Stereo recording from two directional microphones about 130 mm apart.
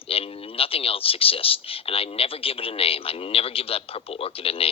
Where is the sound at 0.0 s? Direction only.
45° left (ahead or behind).